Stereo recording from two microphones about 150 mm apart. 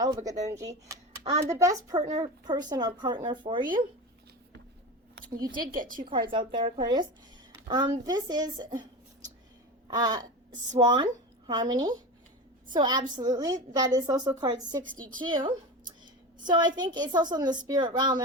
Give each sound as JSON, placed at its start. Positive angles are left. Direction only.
{"t": 0.0, "sound": "speech", "side_deg": -25}
{"t": 1.2, "sound": "a child's voice", "side_deg": -45}
{"t": 1.5, "sound": "speech", "side_deg": -20}
{"t": 5.1, "sound": "speech", "side_deg": -70}
{"t": 6.1, "sound": "speech", "side_deg": -35}
{"t": 9.9, "sound": "speech", "side_deg": -30}